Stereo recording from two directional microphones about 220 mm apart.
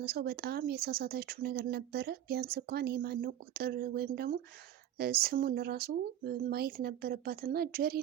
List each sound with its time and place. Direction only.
0.0 s speech: 45° right (ahead or behind)